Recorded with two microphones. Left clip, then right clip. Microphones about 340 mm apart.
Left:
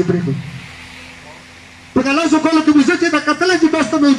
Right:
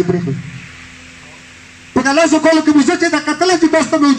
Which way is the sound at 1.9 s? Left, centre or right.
Right.